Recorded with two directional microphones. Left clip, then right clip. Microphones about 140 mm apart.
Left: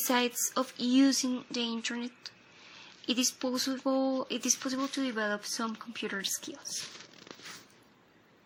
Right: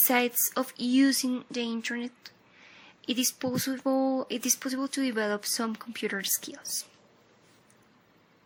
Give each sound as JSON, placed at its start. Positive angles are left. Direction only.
{"t": 0.0, "sound": "speech", "side_deg": -25}